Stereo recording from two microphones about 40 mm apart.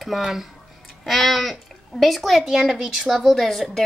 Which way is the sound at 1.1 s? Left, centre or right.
Centre.